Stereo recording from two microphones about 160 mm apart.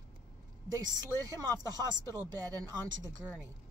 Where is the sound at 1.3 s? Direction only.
20° left (ahead or behind).